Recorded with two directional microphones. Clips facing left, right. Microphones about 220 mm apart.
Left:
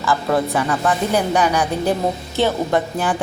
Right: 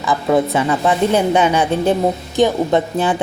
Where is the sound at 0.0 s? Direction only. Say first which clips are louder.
Right 3 dB; 20° right (ahead or behind).